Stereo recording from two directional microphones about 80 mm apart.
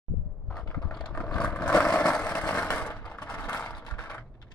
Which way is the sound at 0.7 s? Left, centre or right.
Centre.